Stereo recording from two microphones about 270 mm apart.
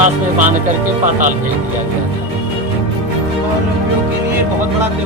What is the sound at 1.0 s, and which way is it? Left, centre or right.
Speech, right.